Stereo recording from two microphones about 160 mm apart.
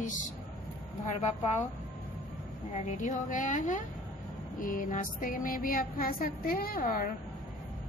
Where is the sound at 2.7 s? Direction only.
45° left (ahead or behind).